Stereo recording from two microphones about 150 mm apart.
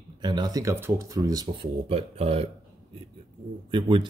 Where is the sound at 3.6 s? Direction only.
35° right (ahead or behind).